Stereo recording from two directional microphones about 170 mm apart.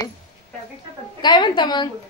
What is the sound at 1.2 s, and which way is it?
Speech, 25° left (ahead or behind).